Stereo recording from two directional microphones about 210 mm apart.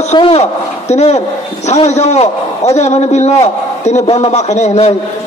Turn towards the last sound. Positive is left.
turn(degrees=30)  # may be behind; listen again after turning